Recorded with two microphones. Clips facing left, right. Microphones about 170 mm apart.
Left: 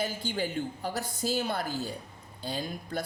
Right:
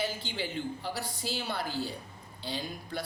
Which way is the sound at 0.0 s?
45° left (ahead or behind).